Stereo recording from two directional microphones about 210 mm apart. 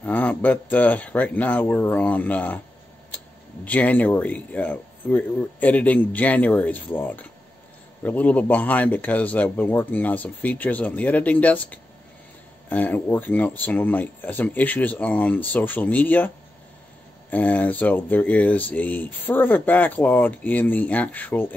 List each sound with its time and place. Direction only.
0.0 s speech: 5° left (ahead or behind)
3.6 s speech: 10° left (ahead or behind)
17.3 s speech: 5° left (ahead or behind)